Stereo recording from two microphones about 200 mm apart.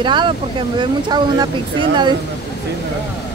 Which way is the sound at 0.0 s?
25° right (ahead or behind).